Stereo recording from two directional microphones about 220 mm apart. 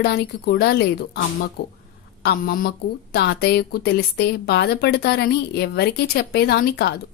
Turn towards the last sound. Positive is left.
turn(degrees=45)  # may be behind; listen again after turning